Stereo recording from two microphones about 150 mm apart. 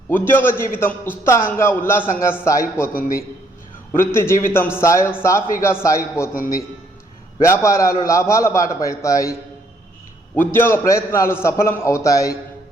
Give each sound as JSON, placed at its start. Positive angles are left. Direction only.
{"t": 0.1, "sound": "a man's voice", "side_deg": 15}
{"t": 2.9, "sound": "speech", "side_deg": 75}
{"t": 3.9, "sound": "a man's voice", "side_deg": 15}
{"t": 7.4, "sound": "a man's voice", "side_deg": 20}
{"t": 10.4, "sound": "a man's voice", "side_deg": 15}